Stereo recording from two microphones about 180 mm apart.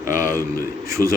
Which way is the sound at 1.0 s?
15° left (ahead or behind).